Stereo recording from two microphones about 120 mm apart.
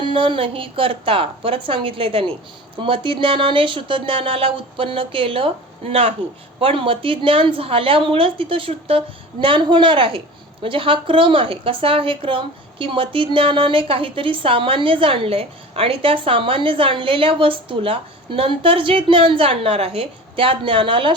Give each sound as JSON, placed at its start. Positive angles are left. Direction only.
{"t": 0.0, "sound": "a woman's voice", "side_deg": -45}